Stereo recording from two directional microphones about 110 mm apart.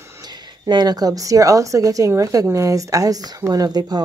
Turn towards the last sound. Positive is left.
turn(degrees=-35)  # may be behind; listen again after turning